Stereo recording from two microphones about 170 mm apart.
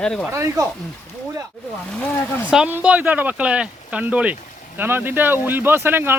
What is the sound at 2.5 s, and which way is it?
Speech, 10° right (ahead or behind).